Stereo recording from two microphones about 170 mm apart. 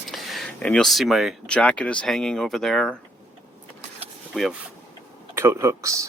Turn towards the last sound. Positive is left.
turn(degrees=-20)  # may be behind; listen again after turning